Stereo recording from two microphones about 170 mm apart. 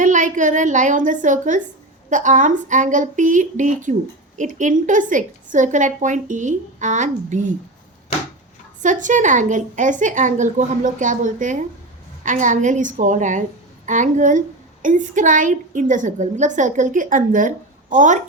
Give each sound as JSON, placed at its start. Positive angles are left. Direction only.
{"t": 0.0, "sound": "a woman's voice", "side_deg": -50}
{"t": 8.8, "sound": "a woman's voice", "side_deg": -50}